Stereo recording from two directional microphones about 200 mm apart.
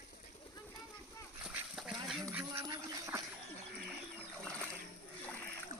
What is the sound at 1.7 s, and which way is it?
Duck, centre (ahead or behind).